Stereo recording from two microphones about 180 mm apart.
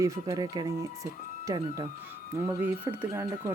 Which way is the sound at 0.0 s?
20° right (ahead or behind).